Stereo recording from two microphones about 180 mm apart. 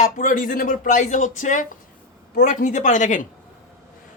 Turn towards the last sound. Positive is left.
turn(degrees=45)  # may be behind; listen again after turning